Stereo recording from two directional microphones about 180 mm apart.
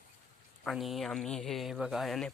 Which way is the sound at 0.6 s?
Centre (ahead or behind).